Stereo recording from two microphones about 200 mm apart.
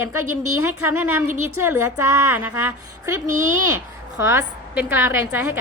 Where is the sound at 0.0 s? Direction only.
15° right (ahead or behind).